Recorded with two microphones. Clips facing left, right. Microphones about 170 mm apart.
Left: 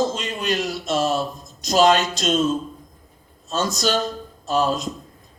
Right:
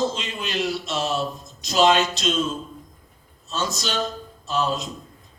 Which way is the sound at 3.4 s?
45° left (ahead or behind).